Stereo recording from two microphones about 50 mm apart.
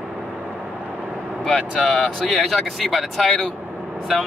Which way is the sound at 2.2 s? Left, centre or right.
Centre.